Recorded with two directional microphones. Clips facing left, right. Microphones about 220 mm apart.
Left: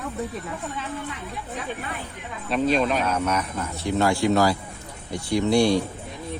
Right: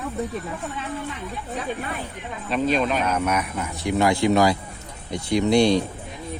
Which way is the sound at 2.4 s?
Centre (ahead or behind).